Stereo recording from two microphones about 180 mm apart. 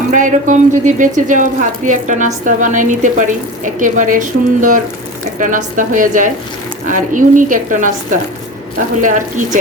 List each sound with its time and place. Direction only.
0.1 s speech: 45° right (ahead or behind)
9.0 s speech: 45° right (ahead or behind)